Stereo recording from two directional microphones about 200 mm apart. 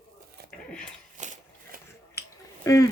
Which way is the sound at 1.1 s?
40° right (ahead or behind).